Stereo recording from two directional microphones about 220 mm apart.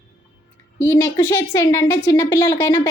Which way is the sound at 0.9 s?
10° left (ahead or behind).